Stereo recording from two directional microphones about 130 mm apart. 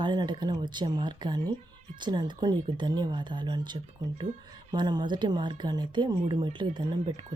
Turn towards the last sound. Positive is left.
turn(degrees=-35)  # may be behind; listen again after turning